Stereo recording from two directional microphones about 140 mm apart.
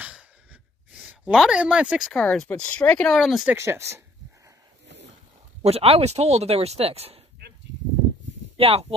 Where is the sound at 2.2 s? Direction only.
10° left (ahead or behind).